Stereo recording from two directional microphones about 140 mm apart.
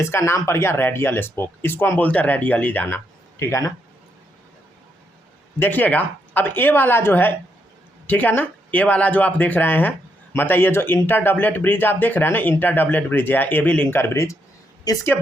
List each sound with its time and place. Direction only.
0.0 s speech: 20° left (ahead or behind)
5.5 s speech: 15° left (ahead or behind)